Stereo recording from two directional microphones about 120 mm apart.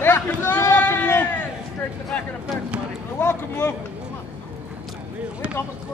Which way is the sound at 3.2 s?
20° left (ahead or behind).